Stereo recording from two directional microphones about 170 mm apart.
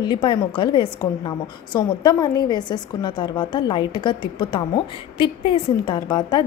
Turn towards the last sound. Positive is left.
turn(degrees=25)  # may be behind; listen again after turning